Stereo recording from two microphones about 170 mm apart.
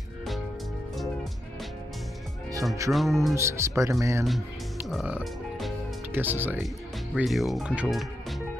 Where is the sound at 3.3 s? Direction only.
15° right (ahead or behind).